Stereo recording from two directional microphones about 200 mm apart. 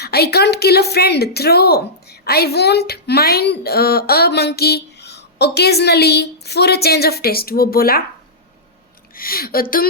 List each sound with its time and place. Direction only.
0.0 s a woman's voice: 55° left (ahead or behind)
9.1 s a woman's voice: 45° left (ahead or behind)